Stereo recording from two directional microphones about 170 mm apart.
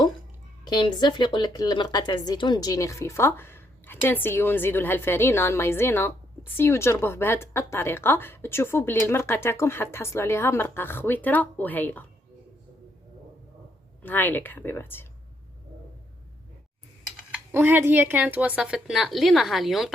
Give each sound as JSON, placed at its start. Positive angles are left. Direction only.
{"t": 0.6, "sound": "speech", "side_deg": 25}
{"t": 14.0, "sound": "speech", "side_deg": 10}
{"t": 17.5, "sound": "a woman's voice", "side_deg": -10}